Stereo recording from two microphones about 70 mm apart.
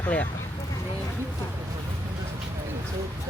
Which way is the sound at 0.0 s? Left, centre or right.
Left.